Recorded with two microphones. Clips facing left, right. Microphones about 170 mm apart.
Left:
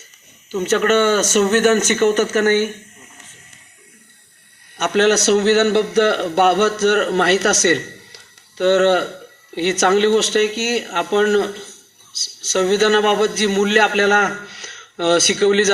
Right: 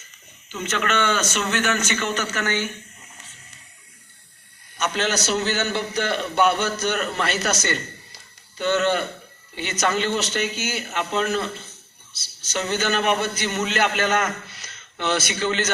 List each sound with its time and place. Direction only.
0.5 s speech: 40° left (ahead or behind)
4.8 s speech: 65° left (ahead or behind)